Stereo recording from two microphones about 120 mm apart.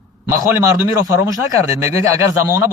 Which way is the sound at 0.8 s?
25° right (ahead or behind).